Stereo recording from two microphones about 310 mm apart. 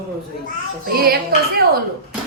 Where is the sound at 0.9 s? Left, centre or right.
Right.